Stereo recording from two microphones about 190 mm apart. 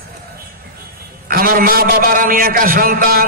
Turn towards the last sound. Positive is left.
turn(degrees=-50)  # may be behind; listen again after turning